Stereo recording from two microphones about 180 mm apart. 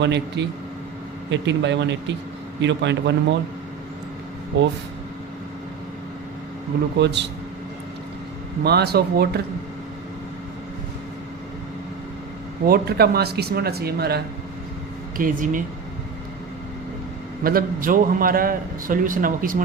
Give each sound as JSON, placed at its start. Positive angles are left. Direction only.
{"t": 0.0, "sound": "speech", "side_deg": -75}
{"t": 7.0, "sound": "speech", "side_deg": -75}
{"t": 8.6, "sound": "speech", "side_deg": -65}
{"t": 12.6, "sound": "speech", "side_deg": -60}
{"t": 15.2, "sound": "a man's voice", "side_deg": -45}
{"t": 17.4, "sound": "a man's voice", "side_deg": -55}